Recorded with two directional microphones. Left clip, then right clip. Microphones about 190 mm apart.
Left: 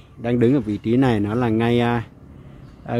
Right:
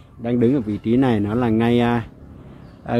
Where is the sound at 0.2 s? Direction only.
25° left (ahead or behind).